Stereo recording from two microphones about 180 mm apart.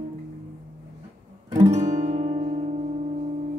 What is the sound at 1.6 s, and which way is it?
Music, 40° right (ahead or behind).